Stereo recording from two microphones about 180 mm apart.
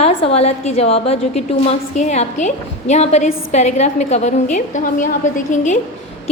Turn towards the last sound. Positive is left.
turn(degrees=45)  # may be behind; listen again after turning